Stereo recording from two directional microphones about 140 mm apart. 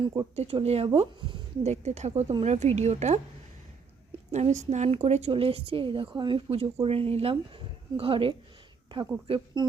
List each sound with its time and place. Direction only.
0.0 s speech: 30° right (ahead or behind)
0.3 s speech: 50° right (ahead or behind)
4.3 s speech: 55° right (ahead or behind)